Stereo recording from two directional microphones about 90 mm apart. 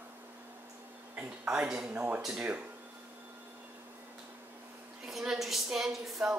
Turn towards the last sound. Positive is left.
turn(degrees=-5)  # may be behind; listen again after turning